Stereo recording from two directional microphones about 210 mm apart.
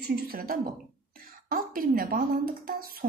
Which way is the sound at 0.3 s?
45° right (ahead or behind).